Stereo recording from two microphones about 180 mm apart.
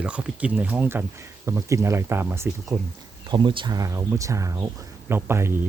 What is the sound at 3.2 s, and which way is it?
A man's voice, 25° right (ahead or behind).